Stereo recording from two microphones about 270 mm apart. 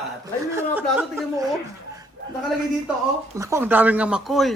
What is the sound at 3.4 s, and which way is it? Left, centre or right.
Speech, centre.